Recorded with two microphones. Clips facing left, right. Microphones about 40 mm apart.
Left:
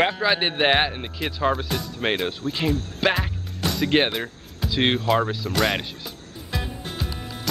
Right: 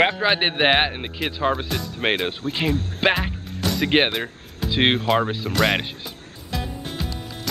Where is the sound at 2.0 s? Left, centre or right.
Right.